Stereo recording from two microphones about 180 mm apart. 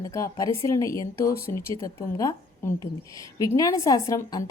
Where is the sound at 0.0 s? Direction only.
20° left (ahead or behind).